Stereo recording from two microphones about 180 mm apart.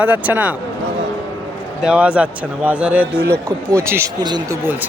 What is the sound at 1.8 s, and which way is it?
Speech, 5° right (ahead or behind).